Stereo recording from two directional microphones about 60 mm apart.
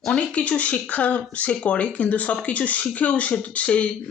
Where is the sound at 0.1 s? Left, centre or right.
Centre.